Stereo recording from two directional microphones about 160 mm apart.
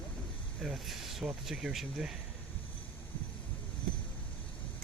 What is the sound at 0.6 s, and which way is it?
Speech, centre (ahead or behind).